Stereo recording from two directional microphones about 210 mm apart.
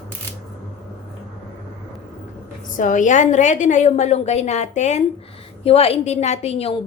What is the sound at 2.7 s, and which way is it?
A woman's voice, 35° left (ahead or behind).